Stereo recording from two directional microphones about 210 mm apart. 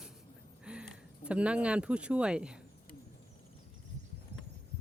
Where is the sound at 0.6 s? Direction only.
5° right (ahead or behind).